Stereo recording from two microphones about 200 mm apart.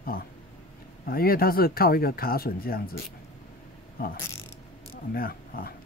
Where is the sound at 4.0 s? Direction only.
45° left (ahead or behind).